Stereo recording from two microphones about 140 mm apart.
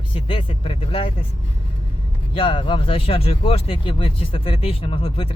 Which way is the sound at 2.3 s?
40° left (ahead or behind).